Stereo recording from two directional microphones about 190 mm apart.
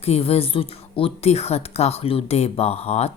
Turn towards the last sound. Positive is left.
turn(degrees=35)  # may be behind; listen again after turning